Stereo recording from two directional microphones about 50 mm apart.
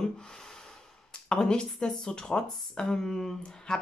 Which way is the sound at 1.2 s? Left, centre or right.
Centre.